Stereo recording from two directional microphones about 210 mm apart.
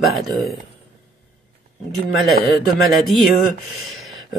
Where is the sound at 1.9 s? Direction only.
Centre (ahead or behind).